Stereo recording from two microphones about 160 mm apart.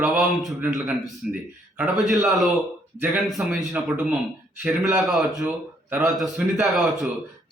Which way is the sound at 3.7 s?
10° right (ahead or behind).